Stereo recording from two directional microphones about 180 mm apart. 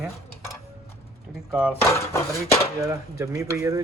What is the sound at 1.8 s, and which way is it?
Speech, 15° left (ahead or behind).